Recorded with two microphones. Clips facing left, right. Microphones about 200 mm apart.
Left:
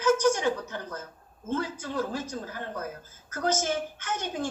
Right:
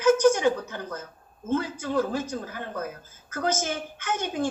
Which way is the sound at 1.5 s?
55° right (ahead or behind).